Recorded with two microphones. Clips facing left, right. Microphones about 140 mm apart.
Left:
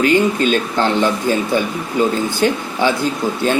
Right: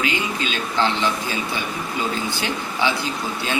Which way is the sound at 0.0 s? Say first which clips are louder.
Left 10 dB; 50° left (ahead or behind).